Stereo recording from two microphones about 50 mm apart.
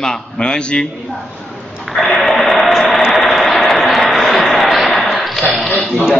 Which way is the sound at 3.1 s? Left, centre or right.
Centre.